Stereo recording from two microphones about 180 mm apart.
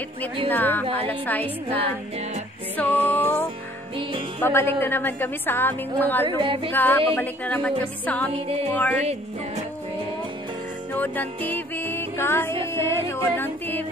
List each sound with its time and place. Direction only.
0.5 s a woman's voice: 10° left (ahead or behind)
2.8 s a woman's voice: 10° left (ahead or behind)
6.2 s music: 30° right (ahead or behind)
6.7 s a woman's voice: 10° left (ahead or behind)
10.9 s music: 10° left (ahead or behind)
12.7 s a woman's voice: 15° left (ahead or behind)